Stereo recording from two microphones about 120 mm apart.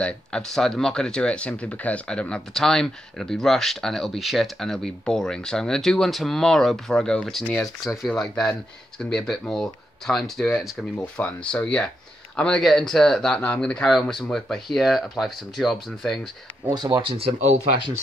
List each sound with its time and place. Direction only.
0.0 s speech: 5° left (ahead or behind)
16.7 s speech: 35° right (ahead or behind)
17.2 s speech: 70° right (ahead or behind)